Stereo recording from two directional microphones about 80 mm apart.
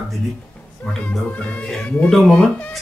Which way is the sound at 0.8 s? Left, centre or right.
Centre.